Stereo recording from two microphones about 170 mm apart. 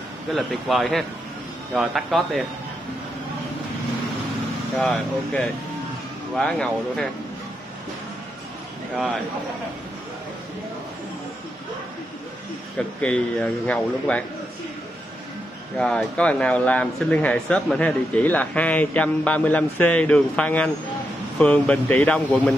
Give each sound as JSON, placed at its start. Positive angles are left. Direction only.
{"t": 0.3, "sound": "speech", "side_deg": 0}
{"t": 4.7, "sound": "speech", "side_deg": 5}
{"t": 12.7, "sound": "speech", "side_deg": 5}
{"t": 15.8, "sound": "speech", "side_deg": 5}